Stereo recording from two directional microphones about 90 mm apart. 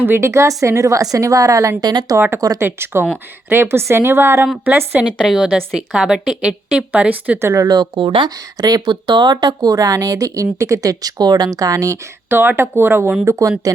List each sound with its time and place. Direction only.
0.0 s a woman's voice: 25° right (ahead or behind)
1.8 s speech: 50° right (ahead or behind)
2.1 s a woman's voice: 25° right (ahead or behind)
5.3 s a woman's voice: 5° right (ahead or behind)
7.4 s speech: 40° right (ahead or behind); by 8.3 s 60° right (ahead or behind)
8.5 s speech: 45° right (ahead or behind)
12.3 s a woman's voice: 25° right (ahead or behind)
13.6 s a woman's voice: 40° right (ahead or behind)